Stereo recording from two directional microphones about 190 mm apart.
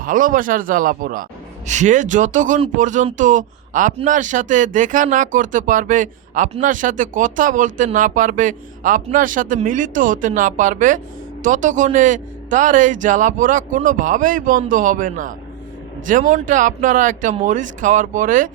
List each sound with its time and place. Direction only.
0.0 s speech: 45° right (ahead or behind)